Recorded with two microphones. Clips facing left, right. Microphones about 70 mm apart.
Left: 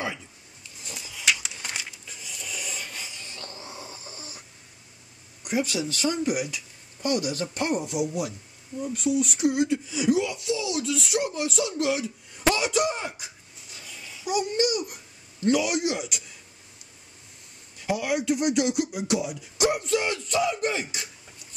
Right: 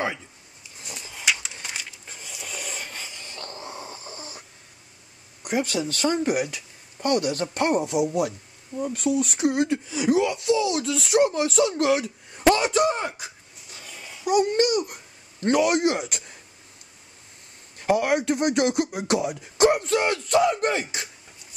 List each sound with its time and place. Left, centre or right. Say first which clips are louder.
1.2 s a sound: even; centre
2.0 s a sound: right 1 dB; right
5.4 s a man's voice: right 2 dB; right
13.7 s babbling: right 2 dB; right
15.4 s speech: right 3 dB; right
17.7 s speech: right 5 dB; right